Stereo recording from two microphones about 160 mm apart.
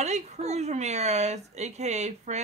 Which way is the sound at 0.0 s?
45° right (ahead or behind).